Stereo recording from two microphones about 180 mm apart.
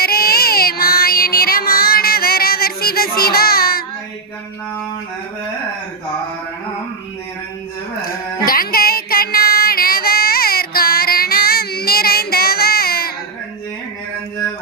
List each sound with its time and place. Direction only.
0.0 s child singing: 55° left (ahead or behind)
8.0 s music: 55° left (ahead or behind)